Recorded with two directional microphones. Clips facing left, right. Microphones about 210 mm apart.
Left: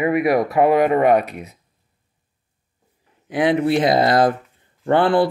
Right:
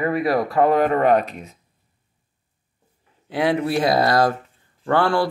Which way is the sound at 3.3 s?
20° left (ahead or behind).